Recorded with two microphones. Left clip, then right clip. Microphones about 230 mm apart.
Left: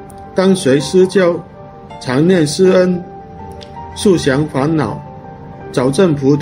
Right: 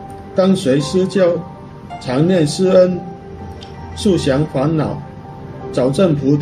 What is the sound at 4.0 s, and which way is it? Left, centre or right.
Speech, left.